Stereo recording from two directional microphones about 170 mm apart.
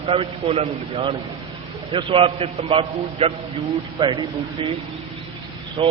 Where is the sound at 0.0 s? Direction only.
35° right (ahead or behind).